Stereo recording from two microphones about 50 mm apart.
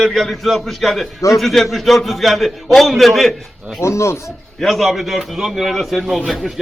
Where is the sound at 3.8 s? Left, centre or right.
Left.